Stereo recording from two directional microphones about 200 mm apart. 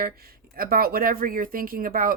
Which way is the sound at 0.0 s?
50° right (ahead or behind).